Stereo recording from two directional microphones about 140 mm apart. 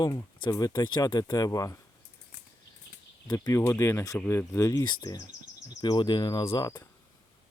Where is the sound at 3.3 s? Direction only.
25° left (ahead or behind).